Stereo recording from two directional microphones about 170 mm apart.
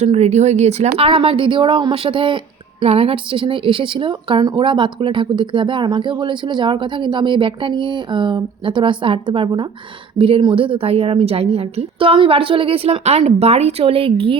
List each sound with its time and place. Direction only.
0.0 s a woman's voice: 40° right (ahead or behind)